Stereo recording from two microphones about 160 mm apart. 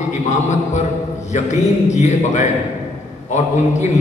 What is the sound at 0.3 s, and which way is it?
A man's voice, 45° left (ahead or behind).